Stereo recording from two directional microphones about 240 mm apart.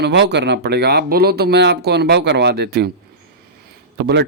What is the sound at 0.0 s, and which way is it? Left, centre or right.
Speech, right.